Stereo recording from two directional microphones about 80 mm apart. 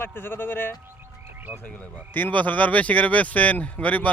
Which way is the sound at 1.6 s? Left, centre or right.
Centre.